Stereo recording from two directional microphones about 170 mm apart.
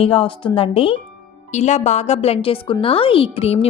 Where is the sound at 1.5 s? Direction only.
45° left (ahead or behind).